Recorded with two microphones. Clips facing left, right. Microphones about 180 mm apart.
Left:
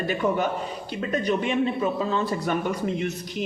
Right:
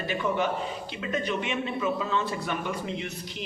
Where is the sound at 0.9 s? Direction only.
40° left (ahead or behind).